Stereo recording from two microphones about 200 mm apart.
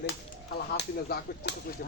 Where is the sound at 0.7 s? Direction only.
60° left (ahead or behind).